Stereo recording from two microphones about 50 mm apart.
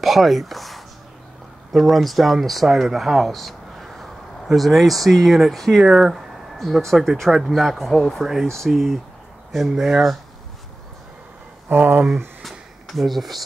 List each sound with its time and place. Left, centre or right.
0.0 s speech: centre
9.7 s speech: centre
11.7 s speech: right
12.4 s a sound: centre